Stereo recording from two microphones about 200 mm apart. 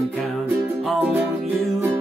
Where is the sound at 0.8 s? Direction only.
10° right (ahead or behind).